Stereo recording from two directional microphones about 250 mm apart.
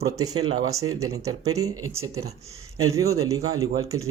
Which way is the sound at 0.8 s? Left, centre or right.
Right.